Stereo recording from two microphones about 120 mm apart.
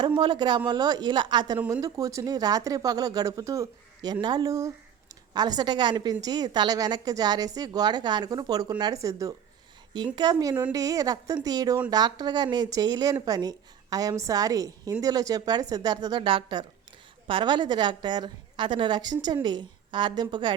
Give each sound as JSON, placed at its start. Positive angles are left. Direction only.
{"t": 0.2, "sound": "a woman's voice", "side_deg": -40}
{"t": 1.5, "sound": "a woman's voice", "side_deg": -10}
{"t": 1.8, "sound": "a woman's voice", "side_deg": -30}